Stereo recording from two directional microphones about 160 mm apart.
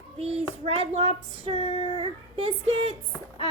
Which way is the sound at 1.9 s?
35° right (ahead or behind).